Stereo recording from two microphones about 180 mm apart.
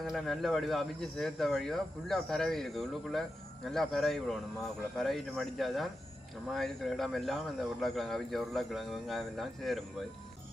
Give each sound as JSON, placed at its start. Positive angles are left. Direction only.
{"t": 0.0, "sound": "speech", "side_deg": 0}